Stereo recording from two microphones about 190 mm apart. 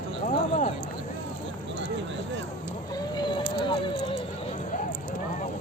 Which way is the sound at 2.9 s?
25° left (ahead or behind).